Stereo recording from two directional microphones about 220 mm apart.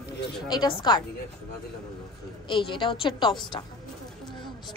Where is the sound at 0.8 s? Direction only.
20° left (ahead or behind).